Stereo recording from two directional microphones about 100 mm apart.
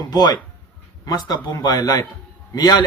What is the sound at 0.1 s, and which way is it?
A man's voice, 45° left (ahead or behind).